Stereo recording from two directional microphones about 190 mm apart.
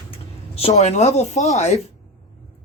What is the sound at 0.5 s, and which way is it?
Speech, 35° left (ahead or behind).